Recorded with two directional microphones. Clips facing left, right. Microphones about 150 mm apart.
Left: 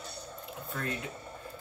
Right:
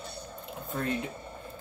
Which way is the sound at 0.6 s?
25° right (ahead or behind).